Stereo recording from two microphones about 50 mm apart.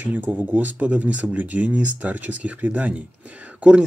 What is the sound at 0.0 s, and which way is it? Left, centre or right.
Speech, right.